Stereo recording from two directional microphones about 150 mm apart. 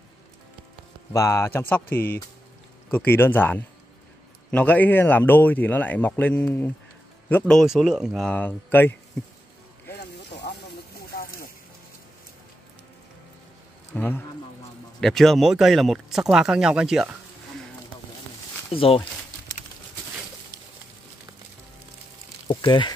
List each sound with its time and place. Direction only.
1.1 s speech: 20° left (ahead or behind)
11.1 s music: 75° left (ahead or behind)
13.9 s speech: 10° left (ahead or behind)
15.0 s speech: centre (ahead or behind)
18.8 s speech: 40° left (ahead or behind)
22.5 s speech: 30° left (ahead or behind)